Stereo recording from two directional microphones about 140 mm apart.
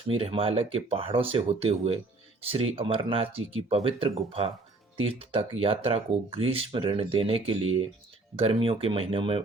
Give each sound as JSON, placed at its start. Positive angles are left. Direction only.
{"t": 0.1, "sound": "speech", "side_deg": -40}